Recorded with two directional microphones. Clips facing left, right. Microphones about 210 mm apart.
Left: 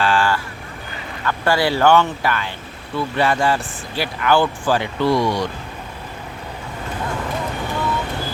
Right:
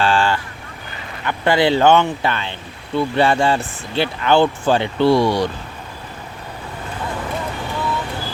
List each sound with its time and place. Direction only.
0.0 s honk: 25° right (ahead or behind)
1.2 s speech: 20° right (ahead or behind)